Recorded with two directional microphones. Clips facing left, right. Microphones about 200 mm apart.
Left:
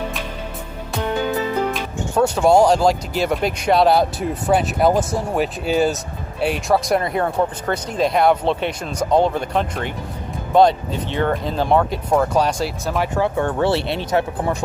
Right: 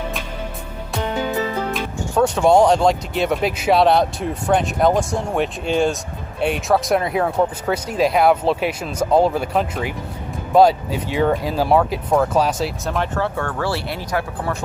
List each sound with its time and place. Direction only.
2.1 s speech: centre (ahead or behind)
13.1 s speech: 15° left (ahead or behind)